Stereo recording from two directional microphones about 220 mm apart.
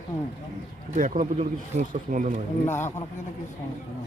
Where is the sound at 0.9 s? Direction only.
35° right (ahead or behind).